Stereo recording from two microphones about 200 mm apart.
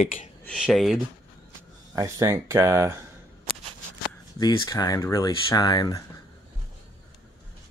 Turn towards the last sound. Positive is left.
turn(degrees=20)  # may be behind; listen again after turning